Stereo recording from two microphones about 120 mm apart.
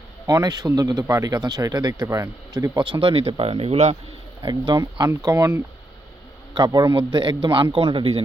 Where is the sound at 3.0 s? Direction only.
50° right (ahead or behind).